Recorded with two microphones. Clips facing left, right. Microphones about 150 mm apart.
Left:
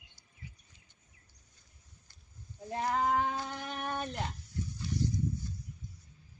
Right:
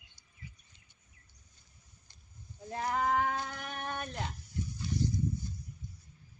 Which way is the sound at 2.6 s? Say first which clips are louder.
Left 1 dB; 20° left (ahead or behind).